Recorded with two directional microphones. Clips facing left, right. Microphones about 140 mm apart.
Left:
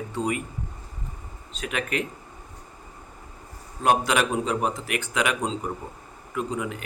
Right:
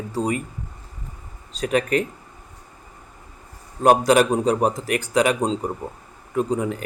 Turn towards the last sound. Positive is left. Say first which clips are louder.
# right 6 dB
turn(degrees=-35)  # may be behind; listen again after turning